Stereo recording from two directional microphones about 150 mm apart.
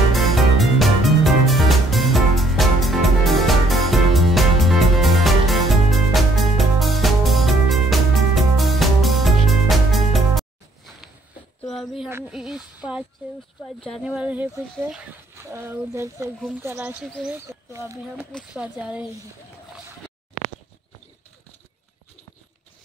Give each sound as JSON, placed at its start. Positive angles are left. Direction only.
{"t": 0.1, "sound": "music", "side_deg": 0}
{"t": 11.6, "sound": "a sound", "side_deg": 0}
{"t": 13.8, "sound": "speech", "side_deg": 0}
{"t": 18.5, "sound": "speech", "side_deg": -5}